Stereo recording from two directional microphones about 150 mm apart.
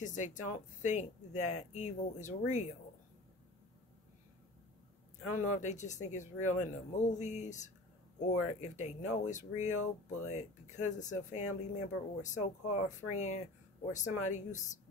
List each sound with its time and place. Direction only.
0.0 s speech: 55° left (ahead or behind)
5.3 s speech: 55° left (ahead or behind)